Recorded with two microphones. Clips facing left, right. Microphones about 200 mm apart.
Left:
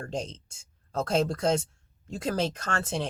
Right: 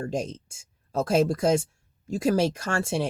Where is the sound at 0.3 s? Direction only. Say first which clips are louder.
Right 8 dB; 10° right (ahead or behind).